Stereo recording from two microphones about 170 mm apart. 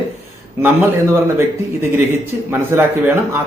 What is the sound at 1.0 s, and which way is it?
Speech, 15° right (ahead or behind).